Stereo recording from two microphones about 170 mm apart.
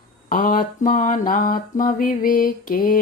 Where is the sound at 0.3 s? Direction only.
55° left (ahead or behind).